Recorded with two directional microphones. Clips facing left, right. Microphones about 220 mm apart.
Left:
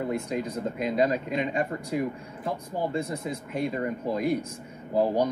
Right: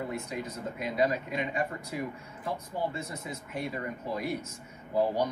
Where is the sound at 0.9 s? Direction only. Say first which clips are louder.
Left 3 dB; 45° left (ahead or behind).